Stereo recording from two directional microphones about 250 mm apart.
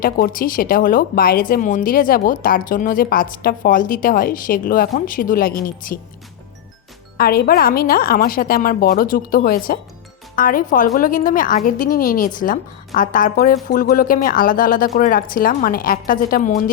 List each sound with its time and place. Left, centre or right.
0.0 s speech: left
7.2 s speech: left